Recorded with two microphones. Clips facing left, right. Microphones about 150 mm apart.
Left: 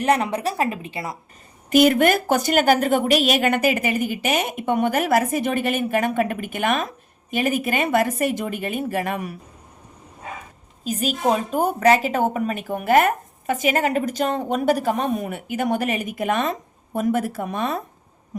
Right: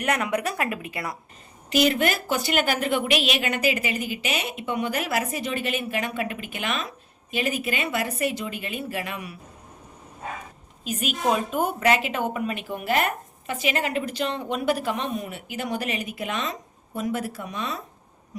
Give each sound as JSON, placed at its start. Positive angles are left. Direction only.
{"t": 0.0, "sound": "a woman's voice", "side_deg": 30}
{"t": 1.7, "sound": "a woman's voice", "side_deg": 50}
{"t": 10.8, "sound": "a woman's voice", "side_deg": 35}